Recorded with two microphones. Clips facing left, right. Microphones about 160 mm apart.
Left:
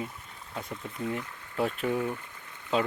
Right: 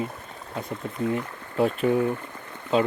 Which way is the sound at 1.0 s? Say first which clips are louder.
Right 7 dB; 60° right (ahead or behind).